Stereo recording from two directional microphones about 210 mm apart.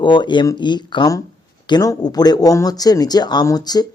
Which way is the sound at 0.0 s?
20° left (ahead or behind).